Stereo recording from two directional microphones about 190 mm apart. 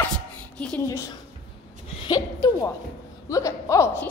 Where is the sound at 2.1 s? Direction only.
20° left (ahead or behind).